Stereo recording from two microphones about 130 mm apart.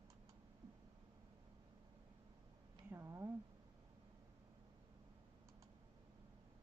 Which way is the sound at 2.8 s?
20° right (ahead or behind).